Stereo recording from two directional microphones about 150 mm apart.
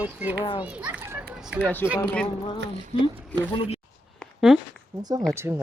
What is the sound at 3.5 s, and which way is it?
Speech, 40° left (ahead or behind).